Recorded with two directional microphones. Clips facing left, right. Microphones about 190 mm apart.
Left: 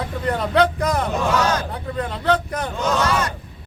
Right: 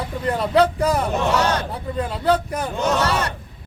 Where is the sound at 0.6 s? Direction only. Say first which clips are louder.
Right 2 dB; 10° right (ahead or behind).